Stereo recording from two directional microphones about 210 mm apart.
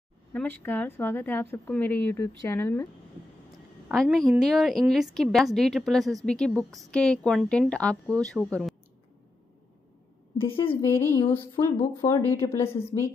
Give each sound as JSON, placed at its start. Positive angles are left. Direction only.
{"t": 0.3, "sound": "speech", "side_deg": 10}
{"t": 3.9, "sound": "a woman's voice", "side_deg": 5}
{"t": 10.3, "sound": "a woman's voice", "side_deg": 25}
{"t": 10.8, "sound": "speech", "side_deg": 10}